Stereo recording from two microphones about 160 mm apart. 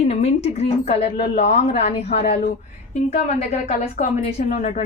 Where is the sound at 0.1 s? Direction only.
40° left (ahead or behind).